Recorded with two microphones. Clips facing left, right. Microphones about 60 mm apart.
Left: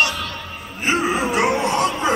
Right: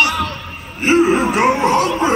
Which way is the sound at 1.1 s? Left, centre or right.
Right.